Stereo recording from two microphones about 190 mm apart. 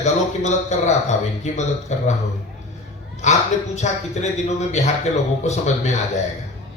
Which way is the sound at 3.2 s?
35° left (ahead or behind).